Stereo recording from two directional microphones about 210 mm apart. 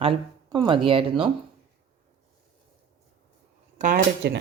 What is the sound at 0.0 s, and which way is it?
Speech, 25° right (ahead or behind).